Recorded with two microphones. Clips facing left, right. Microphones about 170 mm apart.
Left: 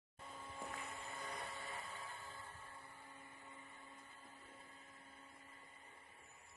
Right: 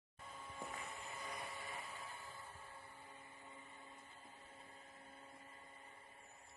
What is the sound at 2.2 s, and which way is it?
Music, 25° right (ahead or behind).